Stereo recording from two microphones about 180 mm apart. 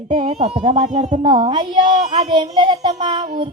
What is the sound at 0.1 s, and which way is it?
Speech, 30° right (ahead or behind).